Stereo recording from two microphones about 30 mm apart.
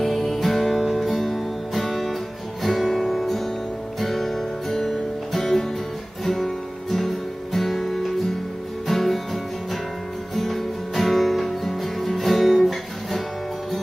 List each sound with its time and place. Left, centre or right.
0.0 s music: centre
3.3 s music: centre
6.2 s guitar: centre
8.8 s music: centre